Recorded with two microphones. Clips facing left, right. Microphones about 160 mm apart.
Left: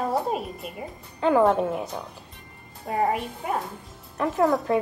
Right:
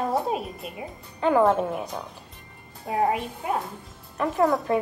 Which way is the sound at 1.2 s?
20° left (ahead or behind).